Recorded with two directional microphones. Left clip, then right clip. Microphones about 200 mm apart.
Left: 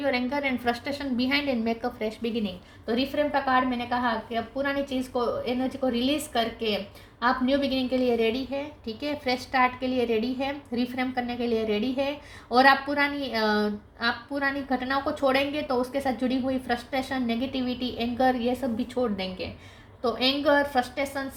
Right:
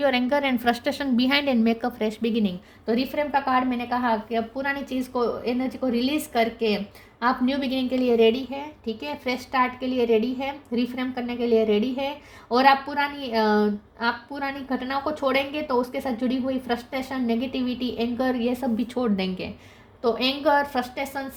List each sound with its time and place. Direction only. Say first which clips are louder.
0.0 s a woman's voice: right 5 dB; 55° right (ahead or behind)